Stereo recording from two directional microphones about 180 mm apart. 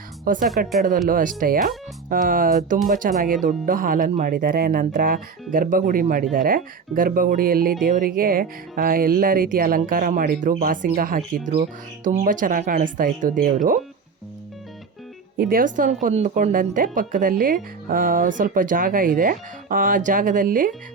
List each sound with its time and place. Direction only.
0.3 s speech: 50° right (ahead or behind)
15.4 s speech: 55° right (ahead or behind)